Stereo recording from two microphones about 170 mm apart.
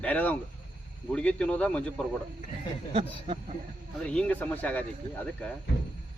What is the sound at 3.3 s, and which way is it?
Speech, 30° right (ahead or behind).